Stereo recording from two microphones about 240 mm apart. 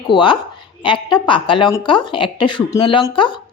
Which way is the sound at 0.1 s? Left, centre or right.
Centre.